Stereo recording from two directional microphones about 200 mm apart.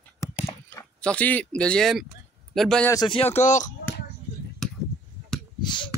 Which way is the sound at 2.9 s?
20° left (ahead or behind).